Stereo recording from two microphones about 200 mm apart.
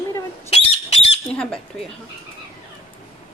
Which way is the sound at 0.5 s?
30° left (ahead or behind).